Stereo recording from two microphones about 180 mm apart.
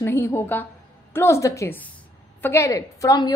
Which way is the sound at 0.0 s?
15° left (ahead or behind).